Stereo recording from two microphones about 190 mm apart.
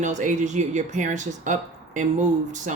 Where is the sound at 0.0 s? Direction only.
40° right (ahead or behind).